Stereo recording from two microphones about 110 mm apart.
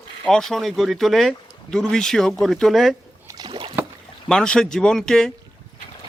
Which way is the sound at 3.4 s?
50° right (ahead or behind).